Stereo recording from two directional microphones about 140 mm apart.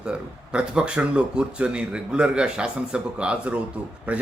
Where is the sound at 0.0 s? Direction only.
5° right (ahead or behind).